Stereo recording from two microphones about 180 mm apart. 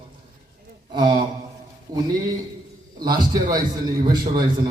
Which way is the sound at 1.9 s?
20° right (ahead or behind).